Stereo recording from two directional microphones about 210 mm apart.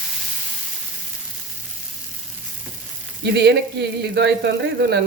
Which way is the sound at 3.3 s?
55° right (ahead or behind).